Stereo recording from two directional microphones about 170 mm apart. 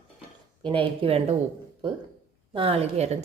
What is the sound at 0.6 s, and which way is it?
Speech, 30° right (ahead or behind).